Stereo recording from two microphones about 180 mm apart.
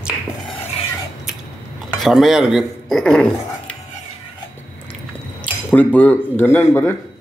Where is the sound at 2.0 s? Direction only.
Centre (ahead or behind).